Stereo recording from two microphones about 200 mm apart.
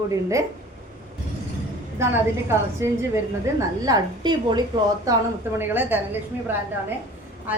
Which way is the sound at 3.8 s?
20° right (ahead or behind).